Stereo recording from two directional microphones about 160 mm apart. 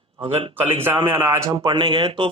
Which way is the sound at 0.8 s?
15° right (ahead or behind).